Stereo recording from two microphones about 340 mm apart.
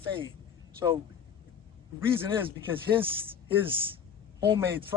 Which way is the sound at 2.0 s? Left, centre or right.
Centre.